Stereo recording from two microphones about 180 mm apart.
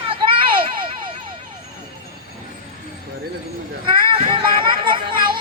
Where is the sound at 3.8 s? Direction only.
30° right (ahead or behind).